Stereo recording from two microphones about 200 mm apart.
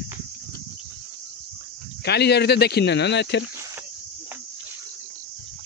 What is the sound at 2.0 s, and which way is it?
Speech, 55° left (ahead or behind).